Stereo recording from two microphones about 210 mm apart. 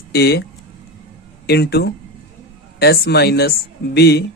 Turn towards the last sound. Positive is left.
turn(degrees=50)  # may be behind; listen again after turning